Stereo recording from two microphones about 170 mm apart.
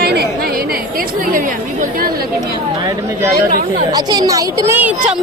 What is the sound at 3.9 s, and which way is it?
Speech, 25° right (ahead or behind).